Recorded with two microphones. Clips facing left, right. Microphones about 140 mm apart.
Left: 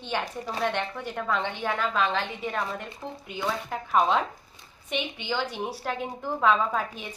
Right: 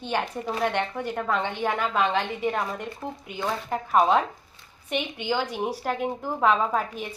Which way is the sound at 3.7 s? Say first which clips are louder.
Right 3 dB; 5° right (ahead or behind).